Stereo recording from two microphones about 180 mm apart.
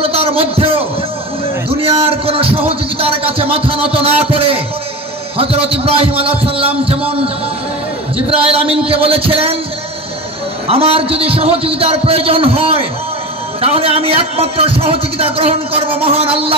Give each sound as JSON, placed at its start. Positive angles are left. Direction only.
{"t": 0.0, "sound": "a sound", "side_deg": -30}
{"t": 3.9, "sound": "a man's voice", "side_deg": -30}
{"t": 8.3, "sound": "a man's voice", "side_deg": -30}
{"t": 10.7, "sound": "a man's voice", "side_deg": -30}